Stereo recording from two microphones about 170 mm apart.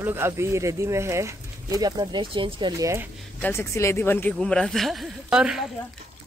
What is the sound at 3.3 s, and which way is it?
Speech, 10° left (ahead or behind).